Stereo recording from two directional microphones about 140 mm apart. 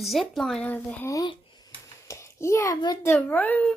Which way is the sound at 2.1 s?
20° left (ahead or behind).